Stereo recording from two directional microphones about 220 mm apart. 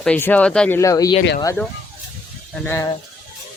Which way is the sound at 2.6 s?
15° left (ahead or behind).